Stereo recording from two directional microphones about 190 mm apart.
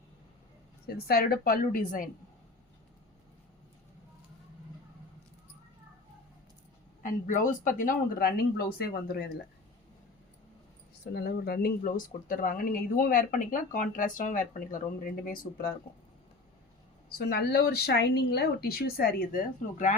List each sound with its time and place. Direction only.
0.9 s speech: 55° left (ahead or behind)
7.0 s speech: 45° left (ahead or behind)
11.0 s speech: 55° left (ahead or behind)
17.1 s speech: 55° left (ahead or behind)